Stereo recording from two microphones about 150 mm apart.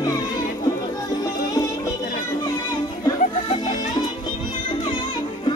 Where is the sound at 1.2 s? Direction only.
20° left (ahead or behind).